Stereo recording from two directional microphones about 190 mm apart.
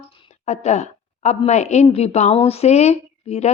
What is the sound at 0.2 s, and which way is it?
Speech, 35° left (ahead or behind).